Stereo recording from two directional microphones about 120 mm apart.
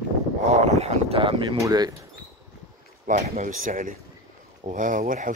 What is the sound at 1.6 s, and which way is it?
Speech, 35° right (ahead or behind).